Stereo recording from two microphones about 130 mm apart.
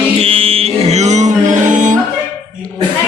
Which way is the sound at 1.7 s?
75° right (ahead or behind).